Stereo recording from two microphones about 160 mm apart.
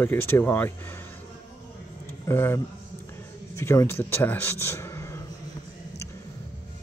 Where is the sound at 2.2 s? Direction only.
15° left (ahead or behind).